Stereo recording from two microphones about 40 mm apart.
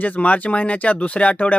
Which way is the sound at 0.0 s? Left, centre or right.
Left.